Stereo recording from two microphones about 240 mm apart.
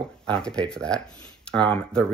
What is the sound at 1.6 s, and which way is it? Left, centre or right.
Speech, right.